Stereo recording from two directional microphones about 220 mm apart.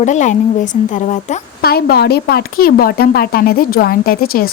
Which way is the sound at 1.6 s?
45° left (ahead or behind).